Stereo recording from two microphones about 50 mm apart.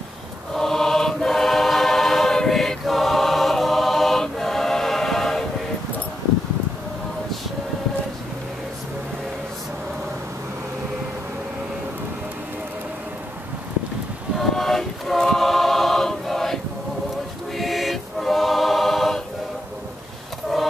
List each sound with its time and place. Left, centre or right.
0.6 s music: centre
14.5 s choir: centre
17.6 s choir: centre
20.5 s a sound: centre